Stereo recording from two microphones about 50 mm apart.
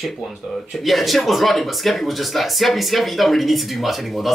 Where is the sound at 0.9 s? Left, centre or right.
Centre.